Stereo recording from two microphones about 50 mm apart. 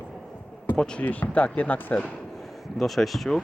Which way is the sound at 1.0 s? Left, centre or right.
Left.